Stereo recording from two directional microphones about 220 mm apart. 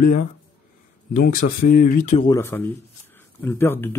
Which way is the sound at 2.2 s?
15° left (ahead or behind).